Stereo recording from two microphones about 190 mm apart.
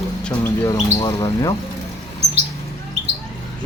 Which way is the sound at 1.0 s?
25° left (ahead or behind).